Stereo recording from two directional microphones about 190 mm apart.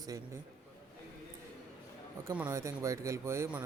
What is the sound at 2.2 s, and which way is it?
A man's voice, 10° right (ahead or behind).